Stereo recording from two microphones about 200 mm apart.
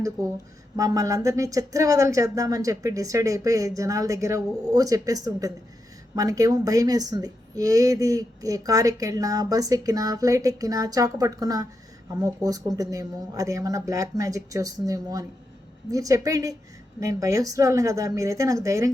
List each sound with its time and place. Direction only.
0.8 s speech: 15° right (ahead or behind)